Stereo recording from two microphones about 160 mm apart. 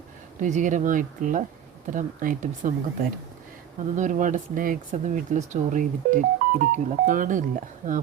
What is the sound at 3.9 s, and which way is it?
Speech, 50° right (ahead or behind).